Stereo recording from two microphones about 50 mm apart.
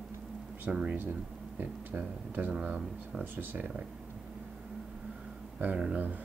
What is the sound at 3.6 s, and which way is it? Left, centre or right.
Speech, right.